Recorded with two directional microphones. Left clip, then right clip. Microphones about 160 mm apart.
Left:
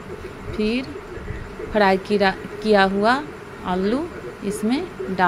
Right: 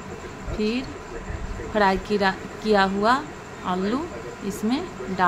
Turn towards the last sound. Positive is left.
turn(degrees=20)  # may be behind; listen again after turning